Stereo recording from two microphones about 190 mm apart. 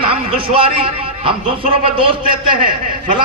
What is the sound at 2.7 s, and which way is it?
Speech, 45° right (ahead or behind).